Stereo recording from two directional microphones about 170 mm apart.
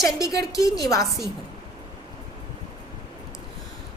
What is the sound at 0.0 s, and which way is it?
A woman's voice, 20° left (ahead or behind).